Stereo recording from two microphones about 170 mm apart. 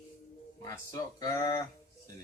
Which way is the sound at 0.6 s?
20° left (ahead or behind).